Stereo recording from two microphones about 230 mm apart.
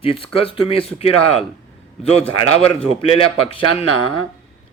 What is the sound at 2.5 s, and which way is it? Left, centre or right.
Speech, left.